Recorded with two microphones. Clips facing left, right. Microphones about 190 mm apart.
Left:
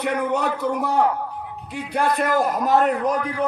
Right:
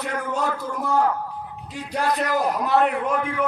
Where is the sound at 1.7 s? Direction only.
55° left (ahead or behind).